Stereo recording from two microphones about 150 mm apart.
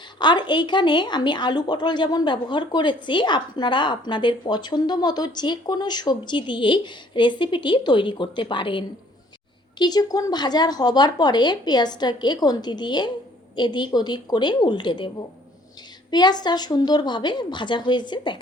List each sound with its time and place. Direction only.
0.2 s a woman's voice: 30° left (ahead or behind)